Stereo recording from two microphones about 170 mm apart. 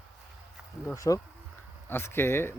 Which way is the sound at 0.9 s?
20° left (ahead or behind).